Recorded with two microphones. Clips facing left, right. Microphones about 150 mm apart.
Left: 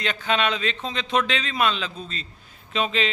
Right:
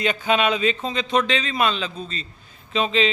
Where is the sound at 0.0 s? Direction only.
10° right (ahead or behind).